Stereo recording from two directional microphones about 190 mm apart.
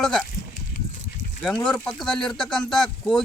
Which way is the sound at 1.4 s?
Centre (ahead or behind).